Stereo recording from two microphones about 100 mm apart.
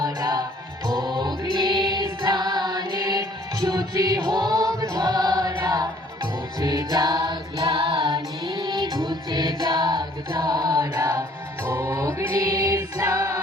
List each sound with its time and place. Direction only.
0.0 s music: 40° right (ahead or behind)